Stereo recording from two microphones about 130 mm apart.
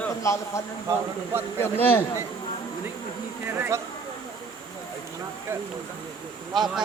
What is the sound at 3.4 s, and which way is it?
Speech, 15° right (ahead or behind).